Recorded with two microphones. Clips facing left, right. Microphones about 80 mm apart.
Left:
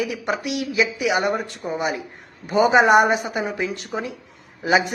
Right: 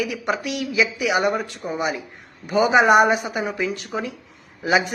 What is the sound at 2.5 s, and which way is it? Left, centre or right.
Speech, left.